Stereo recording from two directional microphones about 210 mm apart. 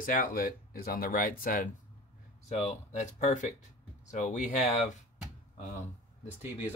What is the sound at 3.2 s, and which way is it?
Speech, 35° left (ahead or behind).